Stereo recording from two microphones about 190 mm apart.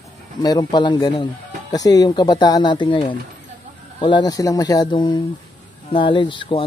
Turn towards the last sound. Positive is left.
turn(degrees=25)  # may be behind; listen again after turning